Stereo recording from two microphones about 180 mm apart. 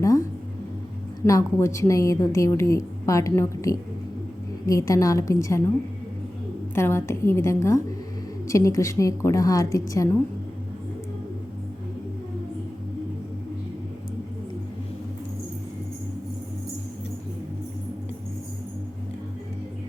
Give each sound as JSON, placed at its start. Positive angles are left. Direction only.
{"t": 0.0, "sound": "a sound", "side_deg": 15}
{"t": 1.3, "sound": "a woman's voice", "side_deg": 15}
{"t": 6.7, "sound": "a woman's voice", "side_deg": 15}